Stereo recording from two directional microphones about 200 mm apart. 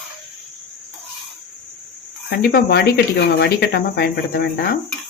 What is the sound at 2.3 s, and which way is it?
Speech, 50° left (ahead or behind).